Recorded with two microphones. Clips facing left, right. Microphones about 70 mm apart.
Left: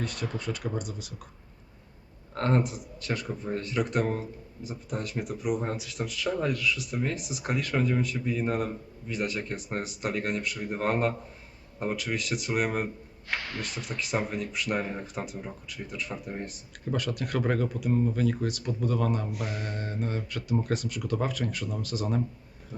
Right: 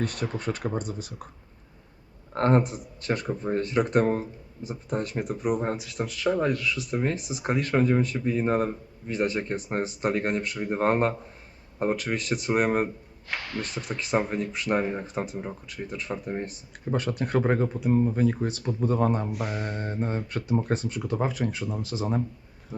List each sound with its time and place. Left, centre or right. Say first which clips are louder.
0.0 s speech: right 4 dB; right
2.3 s speech: right 4 dB; right
6.0 s speech: right 5 dB; right
19.3 s mantra: right 3 dB; centre
20.1 s speech: right 2 dB; right
20.7 s speech: right 2 dB; right